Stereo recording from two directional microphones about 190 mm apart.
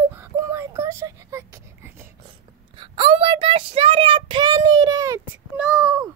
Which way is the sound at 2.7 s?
25° right (ahead or behind).